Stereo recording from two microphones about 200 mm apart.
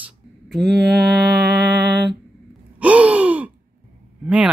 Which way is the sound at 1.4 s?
55° right (ahead or behind).